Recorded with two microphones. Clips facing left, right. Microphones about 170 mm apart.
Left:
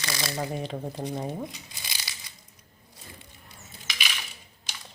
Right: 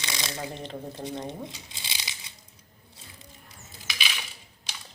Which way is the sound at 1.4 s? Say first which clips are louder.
Left 2 dB; 25° right (ahead or behind).